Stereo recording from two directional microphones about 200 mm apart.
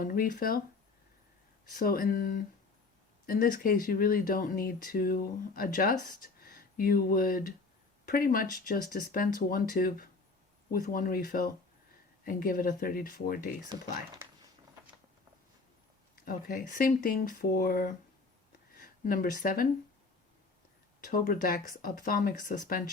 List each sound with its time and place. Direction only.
0.0 s speech: 45° left (ahead or behind)
1.7 s speech: 45° left (ahead or behind)
16.1 s speech: 45° left (ahead or behind)
21.0 s speech: 45° left (ahead or behind)